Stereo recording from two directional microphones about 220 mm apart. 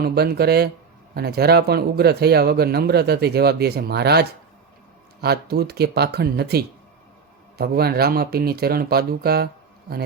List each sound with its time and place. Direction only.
0.0 s speech: 45° right (ahead or behind)